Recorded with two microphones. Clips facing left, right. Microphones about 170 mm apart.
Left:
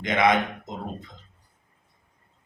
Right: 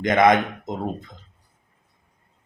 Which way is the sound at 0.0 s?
45° right (ahead or behind).